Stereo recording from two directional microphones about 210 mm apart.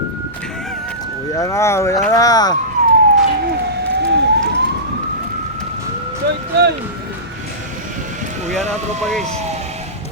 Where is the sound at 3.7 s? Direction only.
55° right (ahead or behind).